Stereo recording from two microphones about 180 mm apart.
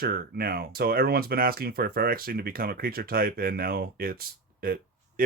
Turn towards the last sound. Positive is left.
turn(degrees=-55)  # may be behind; listen again after turning